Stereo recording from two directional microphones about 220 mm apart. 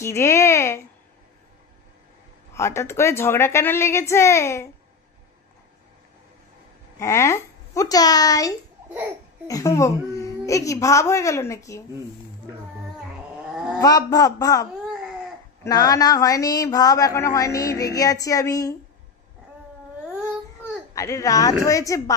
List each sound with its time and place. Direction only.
0.0 s a woman's voice: 10° left (ahead or behind)
2.5 s a woman's voice: 15° left (ahead or behind)
7.0 s a woman's voice: 15° left (ahead or behind)
13.1 s a sound: 5° right (ahead or behind)
13.7 s a woman's voice: 15° left (ahead or behind)
20.9 s a woman's voice: 15° left (ahead or behind)